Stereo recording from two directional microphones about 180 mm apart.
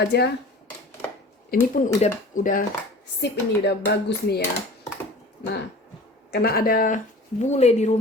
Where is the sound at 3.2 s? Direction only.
70° left (ahead or behind).